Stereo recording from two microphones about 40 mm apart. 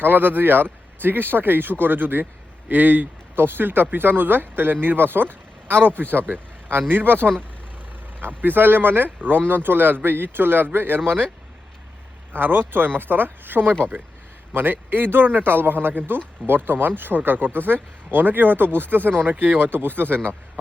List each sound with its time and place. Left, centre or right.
0.0 s a man's voice: right
3.3 s a man's voice: right
12.3 s a man's voice: right
19.5 s a man's voice: right